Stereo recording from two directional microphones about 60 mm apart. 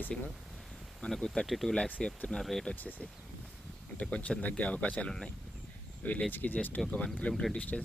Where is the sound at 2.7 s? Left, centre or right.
Left.